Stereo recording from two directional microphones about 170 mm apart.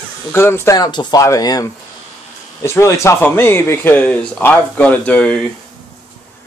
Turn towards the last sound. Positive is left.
turn(degrees=5)  # may be behind; listen again after turning